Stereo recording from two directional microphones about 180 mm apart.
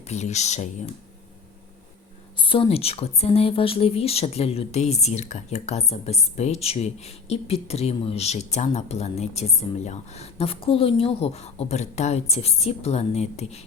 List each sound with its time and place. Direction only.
0.1 s speech: 40° left (ahead or behind)
2.4 s speech: 30° left (ahead or behind)